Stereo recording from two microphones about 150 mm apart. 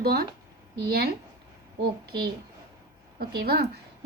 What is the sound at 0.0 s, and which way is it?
Speech, 90° right.